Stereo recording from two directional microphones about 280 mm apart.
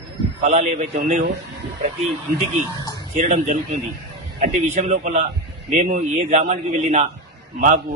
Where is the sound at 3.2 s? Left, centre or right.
Right.